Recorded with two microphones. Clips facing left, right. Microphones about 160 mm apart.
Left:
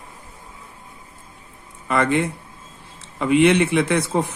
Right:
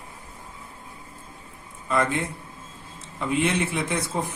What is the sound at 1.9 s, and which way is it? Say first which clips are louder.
A man's voice: left 5 dB; 70° left (ahead or behind).